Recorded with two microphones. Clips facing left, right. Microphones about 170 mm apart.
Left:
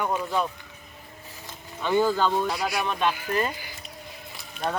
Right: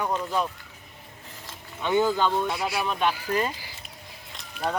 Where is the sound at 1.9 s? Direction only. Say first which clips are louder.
Even; 20° right (ahead or behind).